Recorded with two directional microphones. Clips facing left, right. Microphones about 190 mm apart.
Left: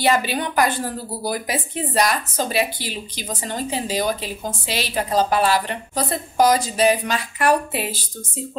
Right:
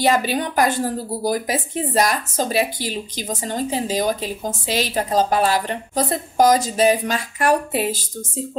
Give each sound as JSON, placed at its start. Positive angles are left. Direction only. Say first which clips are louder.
{"t": 0.0, "sound": "speech", "louder": "right 1 dB", "side_deg": -45}